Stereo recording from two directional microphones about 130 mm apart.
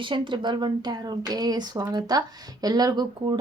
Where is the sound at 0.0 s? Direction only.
40° right (ahead or behind).